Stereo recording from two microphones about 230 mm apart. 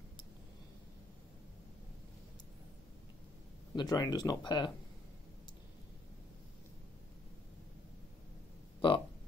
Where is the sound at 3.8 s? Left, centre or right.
Centre.